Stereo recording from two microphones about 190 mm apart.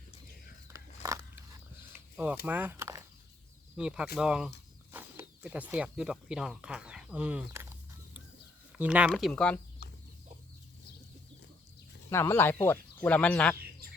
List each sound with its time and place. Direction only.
0.7 s a sound: 15° right (ahead or behind)
2.1 s speech: 10° right (ahead or behind)
8.8 s speech: 5° right (ahead or behind)
12.1 s speech: 15° left (ahead or behind)
13.8 s bird: 50° right (ahead or behind)